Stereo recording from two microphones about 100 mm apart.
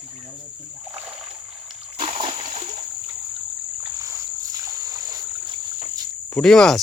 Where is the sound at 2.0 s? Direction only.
65° right (ahead or behind).